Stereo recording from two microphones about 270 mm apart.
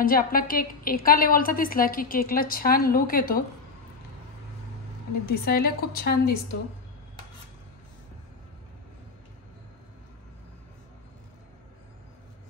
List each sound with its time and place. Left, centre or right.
0.0 s a woman's voice: left
5.4 s a woman's voice: left